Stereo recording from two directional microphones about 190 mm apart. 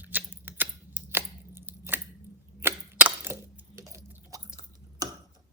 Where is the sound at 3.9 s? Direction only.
15° right (ahead or behind).